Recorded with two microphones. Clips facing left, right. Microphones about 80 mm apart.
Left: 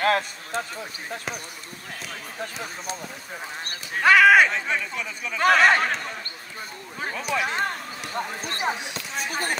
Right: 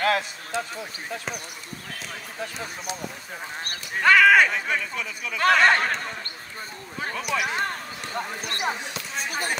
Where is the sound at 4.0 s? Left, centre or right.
Centre.